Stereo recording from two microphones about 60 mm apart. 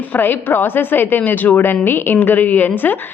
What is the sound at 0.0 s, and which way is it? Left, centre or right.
A woman's voice, left.